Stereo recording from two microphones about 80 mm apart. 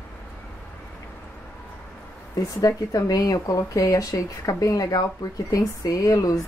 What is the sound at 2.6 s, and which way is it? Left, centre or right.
Speech, left.